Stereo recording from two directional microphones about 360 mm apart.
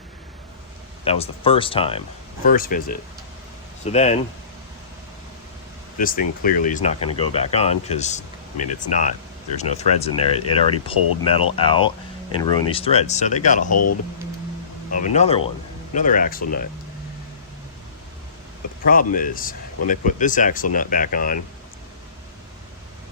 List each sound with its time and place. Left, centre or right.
1.0 s speech: centre
6.0 s speech: left
13.7 s speech: left
15.1 s speech: centre
18.9 s speech: left